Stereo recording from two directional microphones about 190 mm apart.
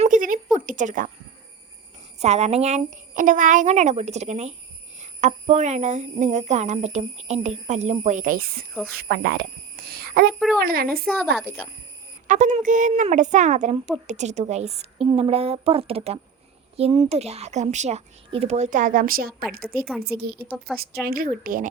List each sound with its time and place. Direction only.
0.0 s a sound: 45° right (ahead or behind)
0.5 s speech: 45° right (ahead or behind)
2.1 s speech: 35° right (ahead or behind); by 10.8 s 50° right (ahead or behind)
11.0 s a child's voice: centre (ahead or behind)
12.3 s speech: 40° right (ahead or behind)
19.8 s a child's voice: centre (ahead or behind)
21.0 s speech: 50° right (ahead or behind)